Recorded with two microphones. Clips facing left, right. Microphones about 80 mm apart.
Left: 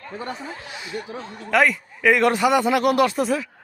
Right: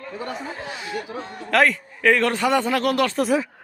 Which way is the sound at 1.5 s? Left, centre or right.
Centre.